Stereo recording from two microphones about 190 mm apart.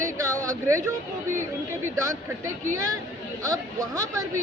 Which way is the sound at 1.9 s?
15° right (ahead or behind).